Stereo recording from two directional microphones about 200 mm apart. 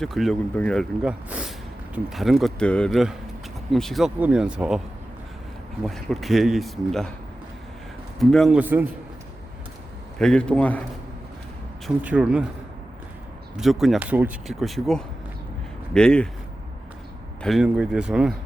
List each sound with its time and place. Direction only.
0.0 s speech: centre (ahead or behind)
5.8 s speech: centre (ahead or behind)
8.2 s speech: centre (ahead or behind)
10.2 s speech: 5° left (ahead or behind)
12.0 s speech: 5° right (ahead or behind)
13.6 s speech: centre (ahead or behind)
17.4 s speech: centre (ahead or behind)